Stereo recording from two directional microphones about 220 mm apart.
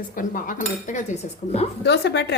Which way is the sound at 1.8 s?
50° left (ahead or behind).